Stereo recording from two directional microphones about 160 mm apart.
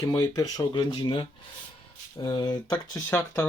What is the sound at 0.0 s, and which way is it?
Speech, 25° left (ahead or behind).